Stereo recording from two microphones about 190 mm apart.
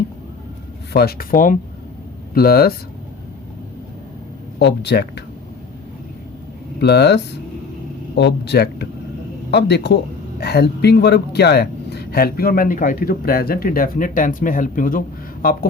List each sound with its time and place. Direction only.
0.9 s speech: 55° left (ahead or behind)
4.6 s speech: 65° left (ahead or behind)
6.7 s speech: 60° left (ahead or behind)